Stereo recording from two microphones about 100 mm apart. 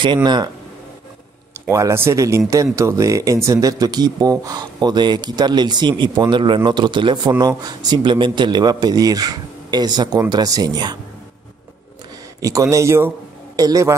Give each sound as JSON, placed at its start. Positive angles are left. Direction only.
{"t": 0.0, "sound": "speech", "side_deg": -50}
{"t": 1.7, "sound": "speech", "side_deg": -30}
{"t": 12.4, "sound": "speech", "side_deg": -35}